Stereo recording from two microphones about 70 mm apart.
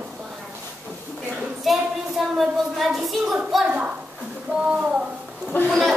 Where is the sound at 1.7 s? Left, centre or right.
Centre.